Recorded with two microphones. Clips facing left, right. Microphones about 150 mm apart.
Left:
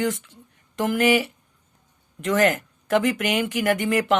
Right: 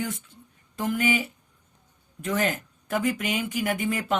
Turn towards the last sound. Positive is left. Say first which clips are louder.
# left 6 dB
turn(degrees=80)